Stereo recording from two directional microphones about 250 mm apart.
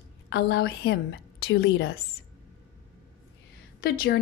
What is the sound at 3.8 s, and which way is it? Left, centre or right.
Speech, left.